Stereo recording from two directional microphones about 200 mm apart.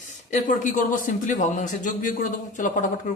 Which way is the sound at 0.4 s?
40° left (ahead or behind).